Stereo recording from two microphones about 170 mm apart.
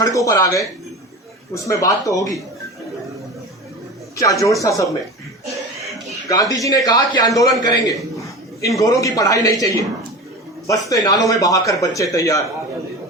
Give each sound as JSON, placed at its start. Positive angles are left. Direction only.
{"t": 0.0, "sound": "speech", "side_deg": 20}
{"t": 1.6, "sound": "speech", "side_deg": 20}
{"t": 4.2, "sound": "speech", "side_deg": 20}
{"t": 6.2, "sound": "speech", "side_deg": 20}